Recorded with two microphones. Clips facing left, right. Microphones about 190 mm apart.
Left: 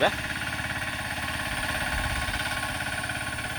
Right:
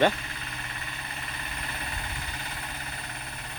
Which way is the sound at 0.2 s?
75° left (ahead or behind).